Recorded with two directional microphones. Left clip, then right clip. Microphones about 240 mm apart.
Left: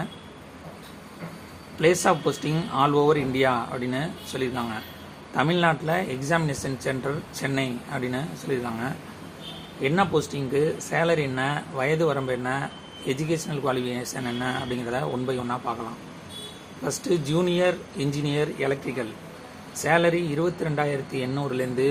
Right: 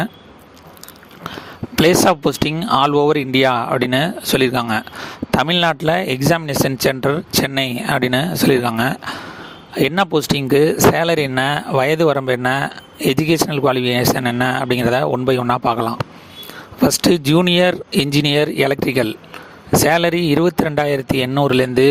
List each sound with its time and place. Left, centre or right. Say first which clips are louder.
1.8 s speech: right 8 dB; right
17.0 s speech: right 7 dB; right